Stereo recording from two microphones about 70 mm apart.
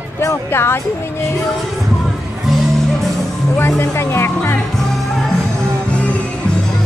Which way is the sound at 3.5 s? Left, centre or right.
Left.